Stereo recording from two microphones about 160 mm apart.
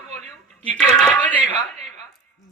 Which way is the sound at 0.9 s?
10° left (ahead or behind).